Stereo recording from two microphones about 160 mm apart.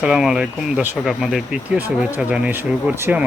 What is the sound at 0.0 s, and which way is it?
Speech, 5° right (ahead or behind).